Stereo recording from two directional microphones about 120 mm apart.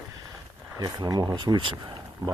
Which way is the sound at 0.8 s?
35° right (ahead or behind).